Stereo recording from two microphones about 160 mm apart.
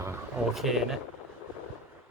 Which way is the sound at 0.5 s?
Centre (ahead or behind).